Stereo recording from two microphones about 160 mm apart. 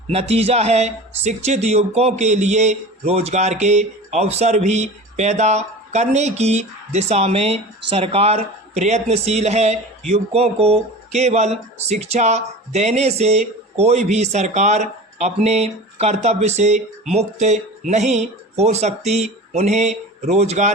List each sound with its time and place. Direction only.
0.1 s speech: 40° right (ahead or behind)